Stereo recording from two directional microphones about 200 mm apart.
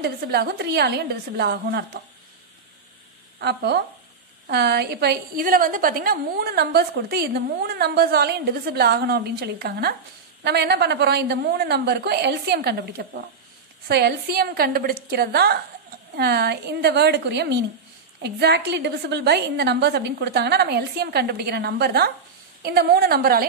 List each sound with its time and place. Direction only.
0.0 s a woman's voice: 55° right (ahead or behind)
3.3 s a woman's voice: 55° right (ahead or behind)